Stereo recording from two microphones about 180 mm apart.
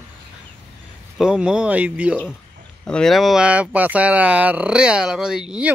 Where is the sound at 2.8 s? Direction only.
5° left (ahead or behind).